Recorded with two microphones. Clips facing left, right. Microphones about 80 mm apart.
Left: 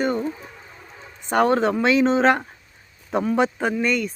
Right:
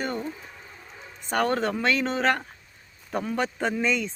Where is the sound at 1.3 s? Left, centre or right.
Centre.